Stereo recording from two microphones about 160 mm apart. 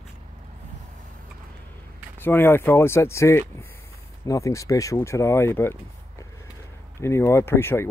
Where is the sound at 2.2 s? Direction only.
15° left (ahead or behind).